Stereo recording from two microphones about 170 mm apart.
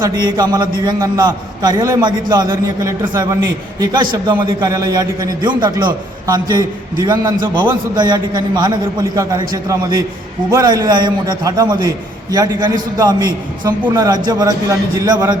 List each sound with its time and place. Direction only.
0.0 s a man's voice: 25° right (ahead or behind)